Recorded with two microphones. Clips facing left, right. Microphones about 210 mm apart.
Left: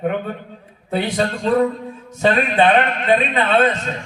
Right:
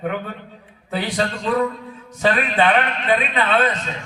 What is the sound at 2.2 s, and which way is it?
A man's voice, 25° left (ahead or behind).